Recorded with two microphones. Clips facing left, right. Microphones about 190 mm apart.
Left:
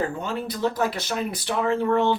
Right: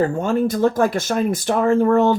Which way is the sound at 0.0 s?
45° right (ahead or behind).